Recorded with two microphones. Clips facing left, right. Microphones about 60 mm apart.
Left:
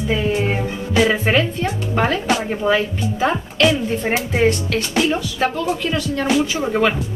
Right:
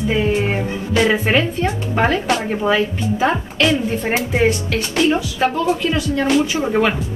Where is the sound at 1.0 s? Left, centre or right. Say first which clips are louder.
Right 1 dB; centre.